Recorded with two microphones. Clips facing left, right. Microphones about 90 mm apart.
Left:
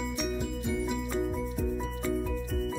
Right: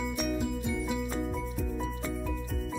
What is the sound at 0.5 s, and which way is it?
Music, centre (ahead or behind).